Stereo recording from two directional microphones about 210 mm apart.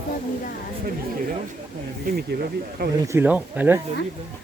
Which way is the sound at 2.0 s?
50° right (ahead or behind).